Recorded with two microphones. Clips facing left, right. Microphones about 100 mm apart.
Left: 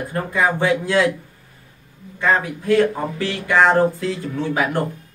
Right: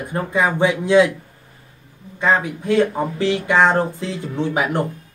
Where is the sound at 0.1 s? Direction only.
20° right (ahead or behind).